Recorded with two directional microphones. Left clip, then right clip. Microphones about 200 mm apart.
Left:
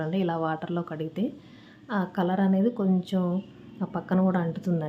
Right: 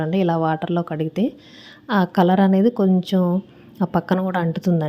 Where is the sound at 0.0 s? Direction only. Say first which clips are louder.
Right 8 dB; 30° right (ahead or behind).